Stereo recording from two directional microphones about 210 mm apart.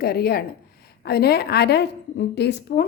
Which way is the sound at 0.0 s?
45° left (ahead or behind).